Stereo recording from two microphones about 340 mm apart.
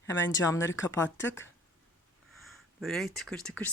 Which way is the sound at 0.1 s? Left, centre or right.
Centre.